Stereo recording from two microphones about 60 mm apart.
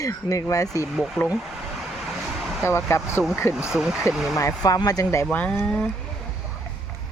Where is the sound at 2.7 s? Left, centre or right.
Left.